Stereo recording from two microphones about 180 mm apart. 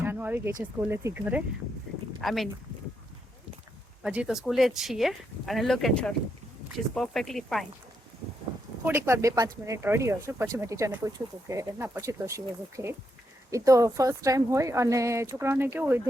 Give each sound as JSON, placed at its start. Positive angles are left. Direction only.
{"t": 0.0, "sound": "a sound", "side_deg": -10}
{"t": 0.6, "sound": "speech", "side_deg": -15}
{"t": 2.2, "sound": "speech", "side_deg": 0}
{"t": 4.0, "sound": "speech", "side_deg": -5}
{"t": 8.8, "sound": "speech", "side_deg": -15}